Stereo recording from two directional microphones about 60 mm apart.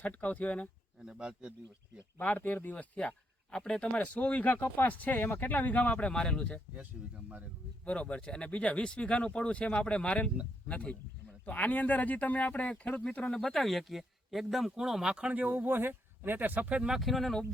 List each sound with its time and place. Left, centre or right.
0.0 s speech: left
1.0 s speech: centre
2.2 s speech: left
7.0 s speech: centre
7.9 s speech: centre
13.4 s speech: centre
15.4 s speech: right
16.8 s speech: centre